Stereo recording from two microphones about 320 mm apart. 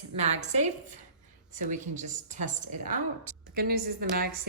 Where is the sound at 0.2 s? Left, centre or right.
Right.